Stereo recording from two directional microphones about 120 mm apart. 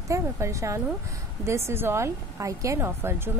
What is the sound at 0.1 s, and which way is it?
A woman's voice, 25° right (ahead or behind).